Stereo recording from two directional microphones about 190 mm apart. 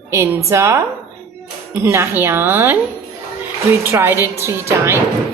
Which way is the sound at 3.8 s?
10° right (ahead or behind).